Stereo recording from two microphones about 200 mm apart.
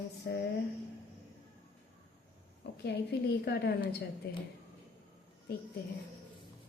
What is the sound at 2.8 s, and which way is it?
A woman's voice, 55° left (ahead or behind).